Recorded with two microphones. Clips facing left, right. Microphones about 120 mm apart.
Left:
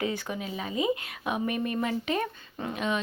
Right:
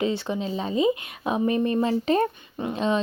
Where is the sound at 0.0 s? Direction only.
25° right (ahead or behind).